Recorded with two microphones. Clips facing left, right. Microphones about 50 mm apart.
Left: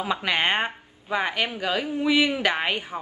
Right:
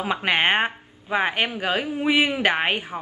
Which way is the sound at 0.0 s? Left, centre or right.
Right.